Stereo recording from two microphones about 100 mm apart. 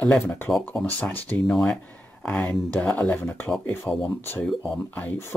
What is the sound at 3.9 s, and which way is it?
Speech, 10° left (ahead or behind).